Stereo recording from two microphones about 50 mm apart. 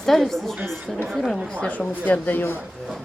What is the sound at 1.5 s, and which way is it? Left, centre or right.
Speech, left.